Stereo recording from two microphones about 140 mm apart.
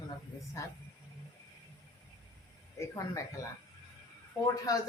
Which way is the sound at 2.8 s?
25° left (ahead or behind).